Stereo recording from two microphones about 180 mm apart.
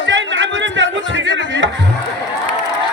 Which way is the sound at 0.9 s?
90° right.